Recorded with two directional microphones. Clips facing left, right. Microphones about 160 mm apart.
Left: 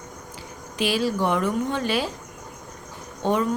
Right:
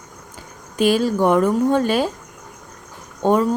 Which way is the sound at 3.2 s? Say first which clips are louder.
Right 6 dB; 45° right (ahead or behind).